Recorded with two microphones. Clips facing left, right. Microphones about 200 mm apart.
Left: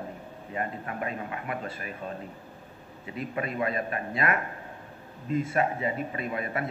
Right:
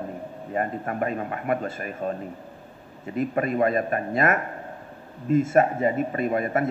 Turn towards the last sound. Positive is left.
turn(degrees=-50)  # may be behind; listen again after turning